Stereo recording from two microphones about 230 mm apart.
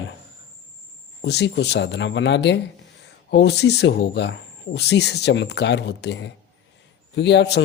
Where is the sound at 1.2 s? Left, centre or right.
Left.